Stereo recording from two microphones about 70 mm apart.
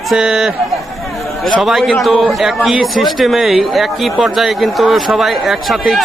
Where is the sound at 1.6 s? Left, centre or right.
Centre.